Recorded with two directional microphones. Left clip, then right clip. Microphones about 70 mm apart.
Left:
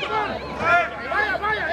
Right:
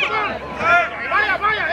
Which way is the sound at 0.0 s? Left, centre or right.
Right.